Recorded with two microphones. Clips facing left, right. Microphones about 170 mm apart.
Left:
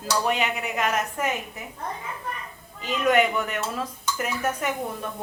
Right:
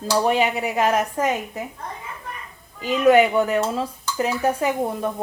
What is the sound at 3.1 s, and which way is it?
Speech, 30° right (ahead or behind).